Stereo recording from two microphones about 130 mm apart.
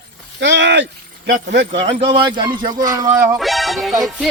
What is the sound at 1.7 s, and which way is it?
Speech, 50° right (ahead or behind).